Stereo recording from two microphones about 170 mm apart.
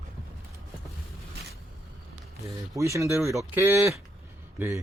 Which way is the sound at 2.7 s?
15° right (ahead or behind).